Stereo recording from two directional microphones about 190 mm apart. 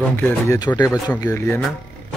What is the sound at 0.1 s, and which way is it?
Speech, 10° left (ahead or behind).